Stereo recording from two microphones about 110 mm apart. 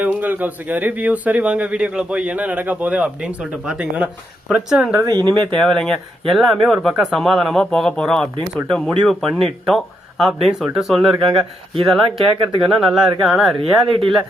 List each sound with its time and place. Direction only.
0.0 s speech: 15° right (ahead or behind)
5.0 s speech: 40° right (ahead or behind)
5.5 s speech: 5° left (ahead or behind)
12.0 s speech: 50° right (ahead or behind)
12.6 s speech: centre (ahead or behind)
13.8 s speech: 55° right (ahead or behind)